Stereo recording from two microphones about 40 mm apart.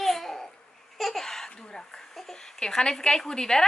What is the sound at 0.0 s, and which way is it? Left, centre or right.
Babbling, centre.